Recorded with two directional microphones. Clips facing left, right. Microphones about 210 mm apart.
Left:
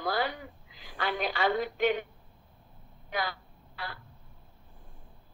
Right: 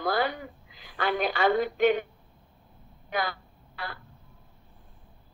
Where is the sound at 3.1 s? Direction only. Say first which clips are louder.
Right 3 dB; 55° right (ahead or behind).